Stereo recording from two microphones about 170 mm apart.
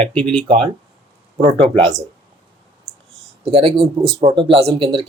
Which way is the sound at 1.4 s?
30° right (ahead or behind).